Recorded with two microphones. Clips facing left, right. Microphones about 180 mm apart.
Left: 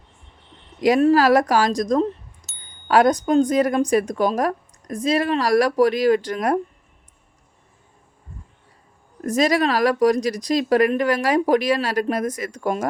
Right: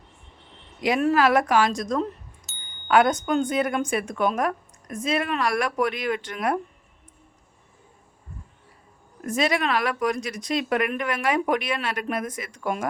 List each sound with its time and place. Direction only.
0.8 s speech: 40° left (ahead or behind)
9.2 s speech: 40° left (ahead or behind)